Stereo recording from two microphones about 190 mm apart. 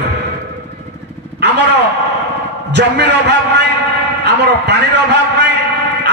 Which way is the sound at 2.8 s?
60° right (ahead or behind).